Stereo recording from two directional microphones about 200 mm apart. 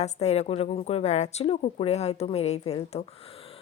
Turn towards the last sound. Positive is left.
turn(degrees=30)  # may be behind; listen again after turning